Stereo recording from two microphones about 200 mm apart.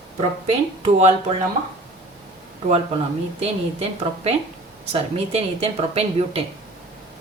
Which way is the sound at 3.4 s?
30° right (ahead or behind).